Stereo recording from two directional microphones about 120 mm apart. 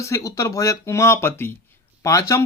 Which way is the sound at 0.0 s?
25° left (ahead or behind).